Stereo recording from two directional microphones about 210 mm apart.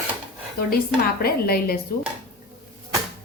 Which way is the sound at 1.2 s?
45° left (ahead or behind).